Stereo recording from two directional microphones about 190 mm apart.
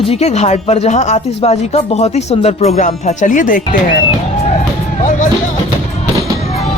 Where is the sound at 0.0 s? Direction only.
35° left (ahead or behind).